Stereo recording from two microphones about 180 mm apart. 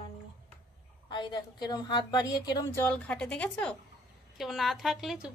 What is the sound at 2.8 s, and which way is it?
A woman's voice, 5° left (ahead or behind).